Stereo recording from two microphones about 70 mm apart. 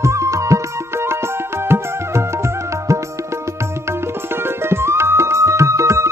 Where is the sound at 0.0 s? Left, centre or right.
Right.